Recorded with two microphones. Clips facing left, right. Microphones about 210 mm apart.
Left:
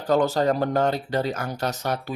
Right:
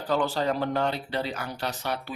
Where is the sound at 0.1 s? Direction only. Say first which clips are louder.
Left 6 dB; 45° left (ahead or behind).